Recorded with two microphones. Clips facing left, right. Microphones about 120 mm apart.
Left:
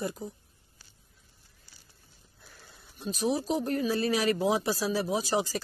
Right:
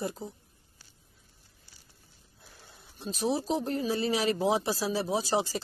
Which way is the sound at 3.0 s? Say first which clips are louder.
Left 1 dB; 30° right (ahead or behind).